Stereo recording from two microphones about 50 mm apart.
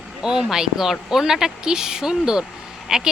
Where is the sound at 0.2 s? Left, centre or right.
Centre.